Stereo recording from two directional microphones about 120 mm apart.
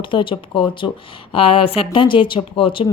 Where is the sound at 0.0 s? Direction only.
45° left (ahead or behind).